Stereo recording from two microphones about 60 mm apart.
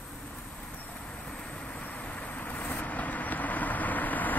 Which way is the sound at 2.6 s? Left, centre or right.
Left.